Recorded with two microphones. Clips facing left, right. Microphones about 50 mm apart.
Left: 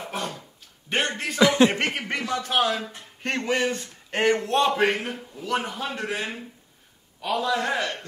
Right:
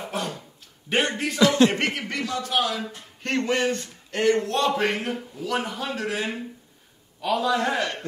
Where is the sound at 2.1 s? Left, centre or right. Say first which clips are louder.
Left 1 dB; left.